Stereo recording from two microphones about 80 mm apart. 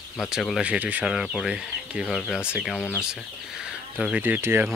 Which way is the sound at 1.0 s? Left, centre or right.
Centre.